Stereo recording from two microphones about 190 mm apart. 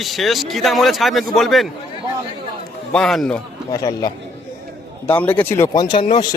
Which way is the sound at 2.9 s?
Centre (ahead or behind).